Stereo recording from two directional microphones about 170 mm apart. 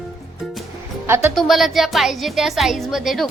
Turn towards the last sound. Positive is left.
turn(degrees=0)  # may be behind; listen again after turning